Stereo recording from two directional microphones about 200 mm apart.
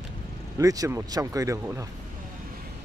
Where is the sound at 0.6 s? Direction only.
15° right (ahead or behind).